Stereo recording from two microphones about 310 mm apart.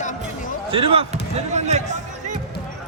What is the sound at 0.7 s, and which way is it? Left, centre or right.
Speech, centre.